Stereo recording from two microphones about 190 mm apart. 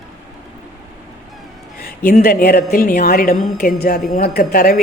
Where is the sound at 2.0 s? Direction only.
50° left (ahead or behind).